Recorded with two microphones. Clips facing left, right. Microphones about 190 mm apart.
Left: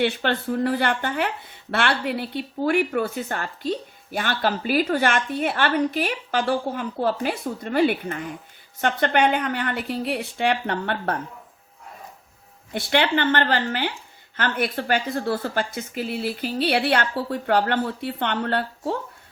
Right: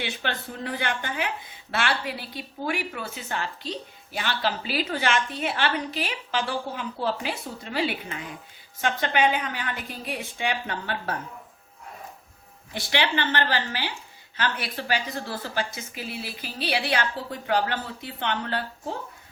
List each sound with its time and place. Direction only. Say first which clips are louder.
0.0 s a woman's voice: left 9 dB; 55° left (ahead or behind)
12.7 s a woman's voice: left 5 dB; 55° left (ahead or behind)